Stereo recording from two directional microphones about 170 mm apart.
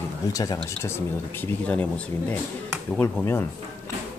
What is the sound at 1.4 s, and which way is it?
Speech, 10° left (ahead or behind).